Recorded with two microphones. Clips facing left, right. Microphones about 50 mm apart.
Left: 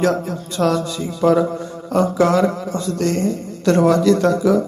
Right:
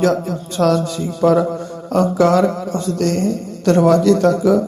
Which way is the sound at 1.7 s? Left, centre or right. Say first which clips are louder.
Right 1 dB; right.